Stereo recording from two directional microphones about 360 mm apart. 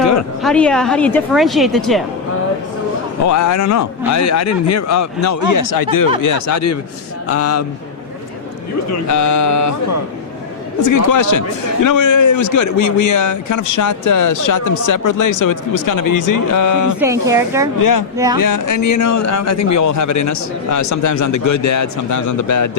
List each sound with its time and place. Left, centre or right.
0.4 s a woman's voice: centre
3.2 s a man's voice: left
6.2 s a man's voice: left
8.9 s a man's voice: left
17.0 s speech: centre
17.7 s a man's voice: left